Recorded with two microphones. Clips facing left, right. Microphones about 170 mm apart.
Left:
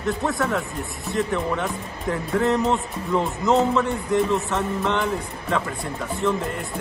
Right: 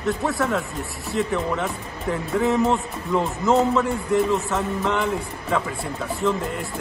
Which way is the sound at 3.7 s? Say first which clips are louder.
Right 1 dB; centre (ahead or behind).